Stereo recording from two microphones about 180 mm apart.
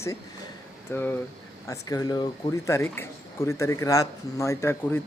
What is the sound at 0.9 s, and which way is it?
Speech, 15° left (ahead or behind).